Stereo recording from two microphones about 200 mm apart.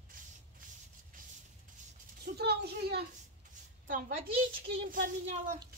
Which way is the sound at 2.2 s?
55° right (ahead or behind).